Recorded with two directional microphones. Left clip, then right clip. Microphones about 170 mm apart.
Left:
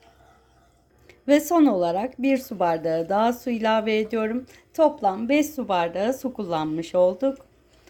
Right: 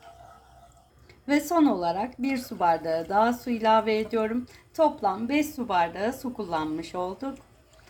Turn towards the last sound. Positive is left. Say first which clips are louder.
# left 12 dB
turn(degrees=50)  # may be behind; listen again after turning